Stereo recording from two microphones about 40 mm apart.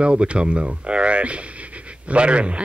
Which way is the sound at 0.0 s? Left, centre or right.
Right.